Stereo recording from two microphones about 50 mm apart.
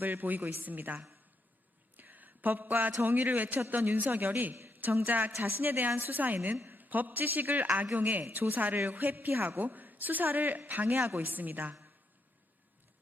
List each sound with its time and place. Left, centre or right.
0.0 s a woman's voice: right
2.0 s a sound: right
3.0 s a woman's voice: right